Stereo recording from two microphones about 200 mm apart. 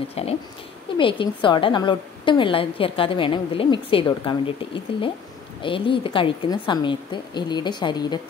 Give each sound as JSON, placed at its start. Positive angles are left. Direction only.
{"t": 0.1, "sound": "a woman's voice", "side_deg": 30}